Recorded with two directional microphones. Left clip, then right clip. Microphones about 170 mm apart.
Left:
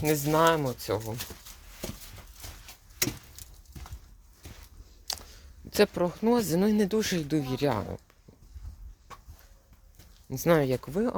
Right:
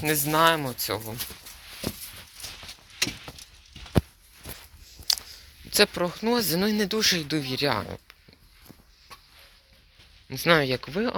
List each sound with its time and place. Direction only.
0.0 s speech: 5° left (ahead or behind); by 1.1 s 20° left (ahead or behind)
4.9 s speech: 25° left (ahead or behind)
10.2 s speech: 15° left (ahead or behind)